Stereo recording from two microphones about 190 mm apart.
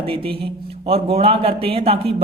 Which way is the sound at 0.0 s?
30° right (ahead or behind).